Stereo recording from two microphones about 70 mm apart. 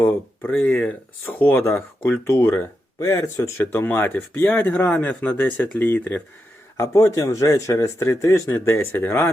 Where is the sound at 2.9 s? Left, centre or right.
Left.